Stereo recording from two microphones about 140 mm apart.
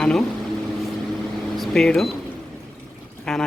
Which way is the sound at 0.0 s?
5° left (ahead or behind).